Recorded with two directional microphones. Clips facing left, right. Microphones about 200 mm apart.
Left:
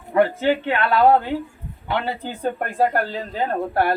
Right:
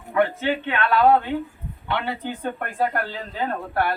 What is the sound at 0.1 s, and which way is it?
Speech, 40° left (ahead or behind).